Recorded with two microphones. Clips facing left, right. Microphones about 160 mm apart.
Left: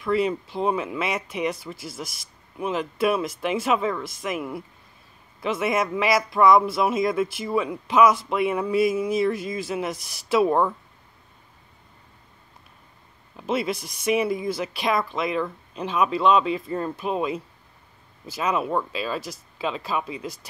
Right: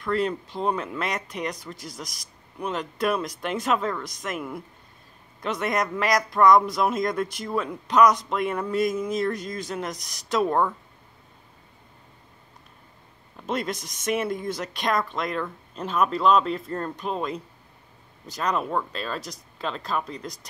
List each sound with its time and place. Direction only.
0.0 s speech: 5° left (ahead or behind)
13.4 s speech: 5° left (ahead or behind)